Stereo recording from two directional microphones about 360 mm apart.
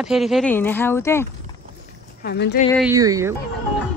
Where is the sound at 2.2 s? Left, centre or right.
Left.